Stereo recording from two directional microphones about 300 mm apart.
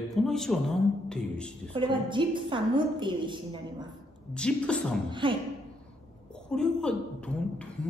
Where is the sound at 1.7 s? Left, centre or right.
Centre.